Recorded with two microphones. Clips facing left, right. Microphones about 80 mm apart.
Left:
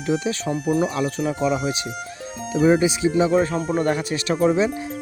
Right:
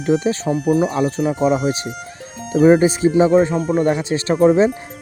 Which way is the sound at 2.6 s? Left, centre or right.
Right.